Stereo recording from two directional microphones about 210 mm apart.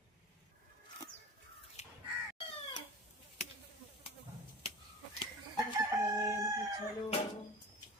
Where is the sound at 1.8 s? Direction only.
35° left (ahead or behind).